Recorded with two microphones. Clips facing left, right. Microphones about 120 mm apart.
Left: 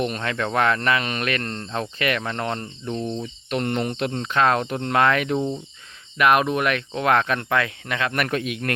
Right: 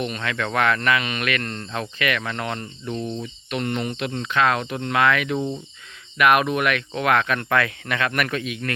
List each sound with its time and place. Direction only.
0.0 s speech: 40° left (ahead or behind)
2.9 s cricket: centre (ahead or behind)
3.5 s speech: 45° left (ahead or behind); by 8.2 s 25° left (ahead or behind)
8.2 s a man's voice: 45° left (ahead or behind)